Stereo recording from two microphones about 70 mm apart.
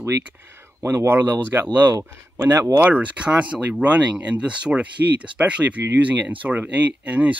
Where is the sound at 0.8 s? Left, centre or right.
Right.